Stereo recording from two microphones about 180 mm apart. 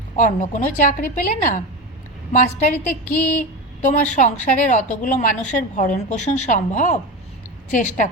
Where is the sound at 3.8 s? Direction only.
45° left (ahead or behind).